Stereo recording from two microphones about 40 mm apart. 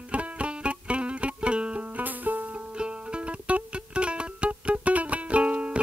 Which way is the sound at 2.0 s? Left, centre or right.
Right.